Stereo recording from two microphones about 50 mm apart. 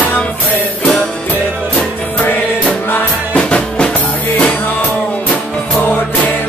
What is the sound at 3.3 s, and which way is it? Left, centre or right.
Music, left.